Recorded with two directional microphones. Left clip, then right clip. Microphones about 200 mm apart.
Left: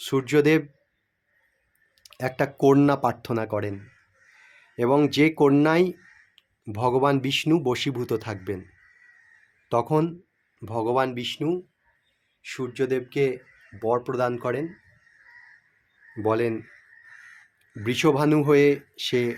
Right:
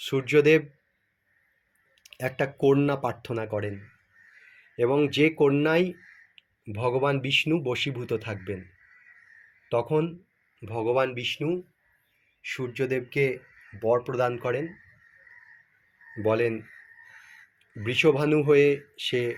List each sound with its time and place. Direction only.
0.0 s speech: 15° left (ahead or behind)
2.1 s speech: 20° left (ahead or behind)
4.8 s speech: 20° left (ahead or behind)
9.6 s speech: 20° left (ahead or behind)
16.2 s speech: 15° left (ahead or behind)
17.8 s speech: 20° left (ahead or behind)